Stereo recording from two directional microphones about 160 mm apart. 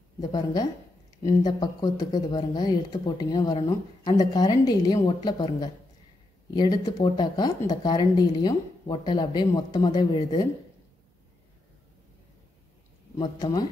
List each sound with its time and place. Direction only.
0.3 s speech: 25° left (ahead or behind)
13.2 s speech: 25° left (ahead or behind)